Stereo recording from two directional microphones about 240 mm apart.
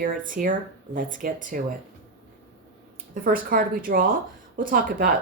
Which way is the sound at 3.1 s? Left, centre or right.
Right.